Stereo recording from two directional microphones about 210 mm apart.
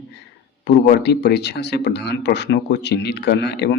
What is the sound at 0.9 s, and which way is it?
Speech, 50° left (ahead or behind).